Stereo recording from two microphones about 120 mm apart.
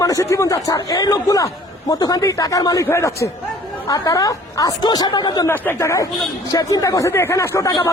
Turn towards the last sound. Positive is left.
turn(degrees=25)  # may be behind; listen again after turning